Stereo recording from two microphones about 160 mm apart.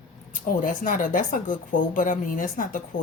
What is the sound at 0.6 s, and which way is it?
Speech, 55° left (ahead or behind).